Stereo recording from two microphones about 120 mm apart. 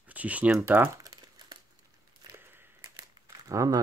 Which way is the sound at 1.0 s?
30° right (ahead or behind).